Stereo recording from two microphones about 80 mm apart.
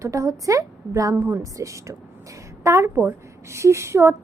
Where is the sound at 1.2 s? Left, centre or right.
Right.